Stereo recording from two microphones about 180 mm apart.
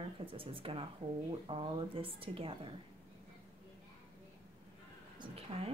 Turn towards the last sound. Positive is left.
turn(degrees=-35)  # may be behind; listen again after turning